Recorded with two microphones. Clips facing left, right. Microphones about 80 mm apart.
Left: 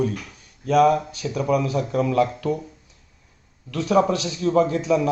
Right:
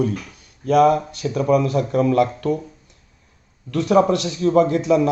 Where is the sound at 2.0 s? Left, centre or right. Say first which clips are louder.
Right 3 dB; centre.